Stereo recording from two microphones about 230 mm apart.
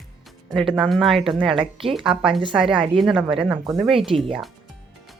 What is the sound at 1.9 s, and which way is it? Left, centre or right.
Speech, centre.